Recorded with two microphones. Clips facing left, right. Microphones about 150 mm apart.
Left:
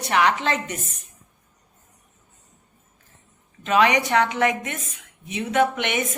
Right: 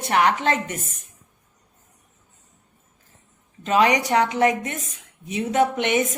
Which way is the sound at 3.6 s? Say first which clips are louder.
Even; 35° right (ahead or behind).